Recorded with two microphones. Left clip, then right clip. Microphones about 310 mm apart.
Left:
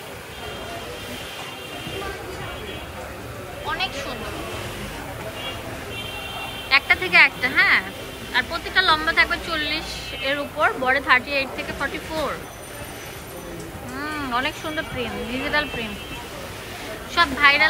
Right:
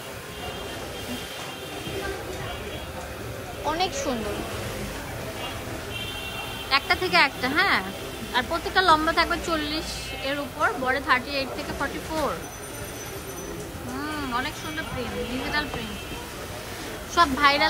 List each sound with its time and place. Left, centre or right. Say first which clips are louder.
3.6 s a sound: even; centre
6.7 s speech: left 5 dB; centre
14.3 s speech: left 7 dB; centre
17.1 s speech: left 3 dB; centre